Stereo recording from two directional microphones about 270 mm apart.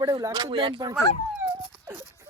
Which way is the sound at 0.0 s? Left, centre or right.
Centre.